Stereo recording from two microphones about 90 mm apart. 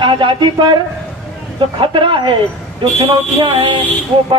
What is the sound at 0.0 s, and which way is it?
Speech, 65° right (ahead or behind).